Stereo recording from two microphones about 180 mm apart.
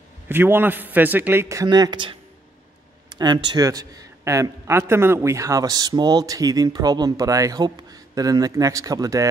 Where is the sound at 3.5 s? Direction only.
20° right (ahead or behind).